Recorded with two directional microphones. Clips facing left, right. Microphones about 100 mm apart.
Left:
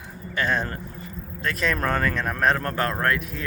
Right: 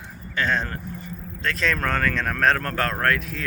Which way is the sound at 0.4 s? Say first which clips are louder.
Even; 10° left (ahead or behind).